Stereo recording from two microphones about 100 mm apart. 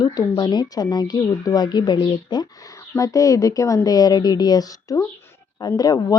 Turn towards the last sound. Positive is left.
turn(degrees=40)  # may be behind; listen again after turning